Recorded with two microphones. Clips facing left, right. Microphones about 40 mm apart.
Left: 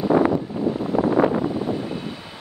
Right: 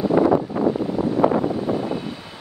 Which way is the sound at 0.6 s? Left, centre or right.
Centre.